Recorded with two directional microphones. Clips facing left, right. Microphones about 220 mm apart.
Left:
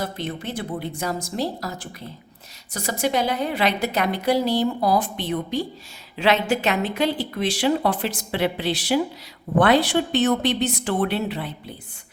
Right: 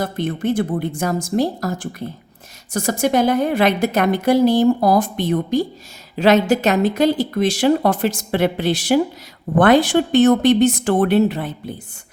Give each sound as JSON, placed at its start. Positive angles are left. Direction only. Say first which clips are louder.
{"t": 0.0, "sound": "a woman's voice", "louder": "right 7 dB", "side_deg": -50}